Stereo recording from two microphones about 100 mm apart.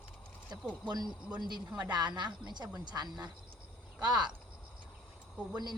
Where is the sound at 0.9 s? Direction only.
45° right (ahead or behind).